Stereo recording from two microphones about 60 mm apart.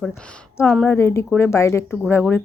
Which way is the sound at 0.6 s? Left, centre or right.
Left.